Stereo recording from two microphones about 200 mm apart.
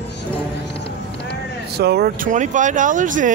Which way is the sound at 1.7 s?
55° right (ahead or behind).